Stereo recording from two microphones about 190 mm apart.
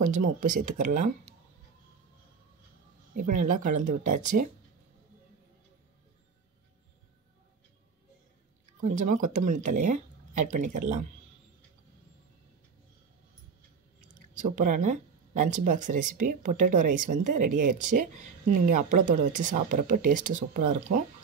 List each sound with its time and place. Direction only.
0.2 s speech: 45° right (ahead or behind)
3.2 s speech: 45° right (ahead or behind)
8.8 s speech: 40° right (ahead or behind)
14.0 s speech: 40° right (ahead or behind)